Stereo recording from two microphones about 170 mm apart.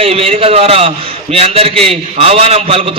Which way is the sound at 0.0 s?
35° right (ahead or behind).